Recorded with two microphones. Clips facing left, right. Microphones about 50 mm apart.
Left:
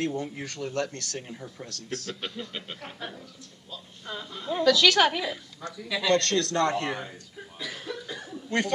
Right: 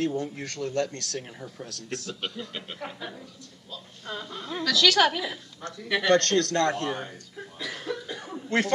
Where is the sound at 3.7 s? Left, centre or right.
Centre.